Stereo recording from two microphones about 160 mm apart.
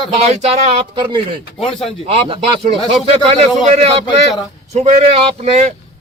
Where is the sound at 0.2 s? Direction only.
45° right (ahead or behind).